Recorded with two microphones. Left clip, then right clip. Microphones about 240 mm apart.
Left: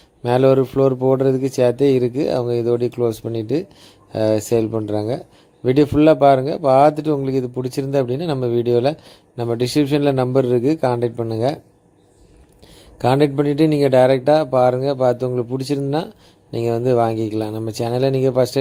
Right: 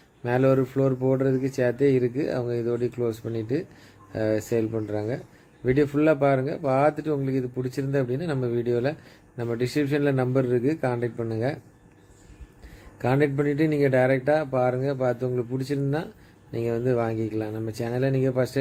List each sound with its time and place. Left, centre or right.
0.2 s speech: left
13.0 s speech: left